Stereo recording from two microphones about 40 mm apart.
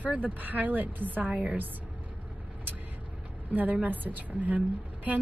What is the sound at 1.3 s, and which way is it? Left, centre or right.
Speech, right.